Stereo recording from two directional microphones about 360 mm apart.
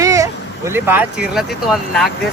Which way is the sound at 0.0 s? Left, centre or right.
Centre.